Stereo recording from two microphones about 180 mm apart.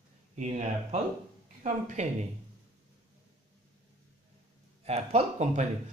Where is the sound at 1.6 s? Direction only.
40° right (ahead or behind).